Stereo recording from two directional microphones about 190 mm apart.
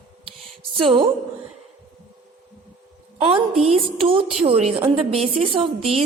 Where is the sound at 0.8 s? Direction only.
25° right (ahead or behind).